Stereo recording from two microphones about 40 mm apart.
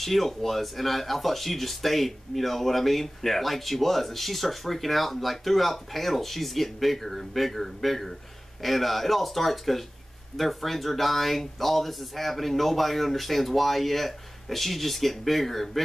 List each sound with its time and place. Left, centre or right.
0.0 s speech: centre